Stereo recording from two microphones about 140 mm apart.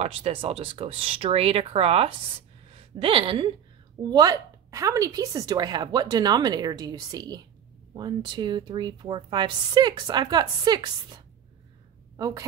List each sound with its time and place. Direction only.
0.0 s a woman's voice: 45° right (ahead or behind); by 12.4 s 25° right (ahead or behind)